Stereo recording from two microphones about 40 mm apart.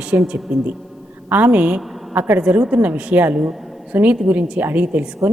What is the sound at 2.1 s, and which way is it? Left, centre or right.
A woman's voice, right.